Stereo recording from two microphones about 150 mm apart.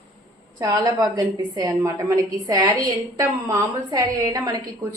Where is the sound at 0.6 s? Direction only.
25° right (ahead or behind).